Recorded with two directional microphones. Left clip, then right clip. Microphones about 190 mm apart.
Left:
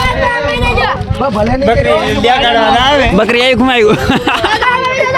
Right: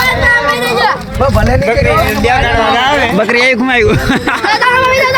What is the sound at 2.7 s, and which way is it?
Speech, 60° left (ahead or behind).